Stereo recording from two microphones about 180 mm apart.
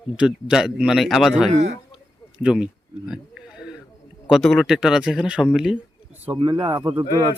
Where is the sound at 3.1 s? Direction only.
5° right (ahead or behind).